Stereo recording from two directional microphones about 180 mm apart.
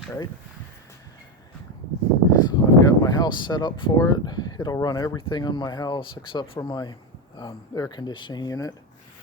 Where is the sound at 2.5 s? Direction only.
20° left (ahead or behind).